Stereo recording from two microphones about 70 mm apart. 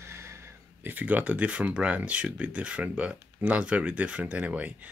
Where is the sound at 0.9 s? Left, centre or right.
Right.